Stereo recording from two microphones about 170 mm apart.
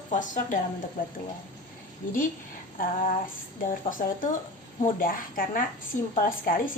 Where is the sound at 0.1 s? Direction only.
50° left (ahead or behind).